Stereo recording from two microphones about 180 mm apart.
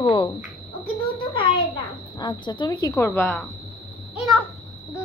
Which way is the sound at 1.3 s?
30° left (ahead or behind).